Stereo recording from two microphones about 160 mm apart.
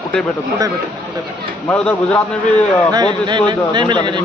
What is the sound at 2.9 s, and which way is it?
Speech, 25° right (ahead or behind).